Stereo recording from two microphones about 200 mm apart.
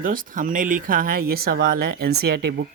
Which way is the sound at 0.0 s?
45° right (ahead or behind).